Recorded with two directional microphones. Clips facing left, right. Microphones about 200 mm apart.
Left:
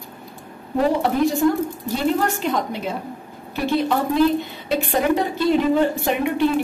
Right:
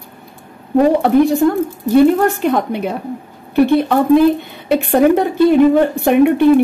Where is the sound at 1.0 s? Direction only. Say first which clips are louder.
Right 7 dB; 60° right (ahead or behind).